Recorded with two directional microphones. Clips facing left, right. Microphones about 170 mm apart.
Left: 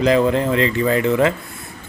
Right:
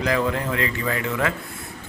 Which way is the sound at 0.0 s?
25° left (ahead or behind).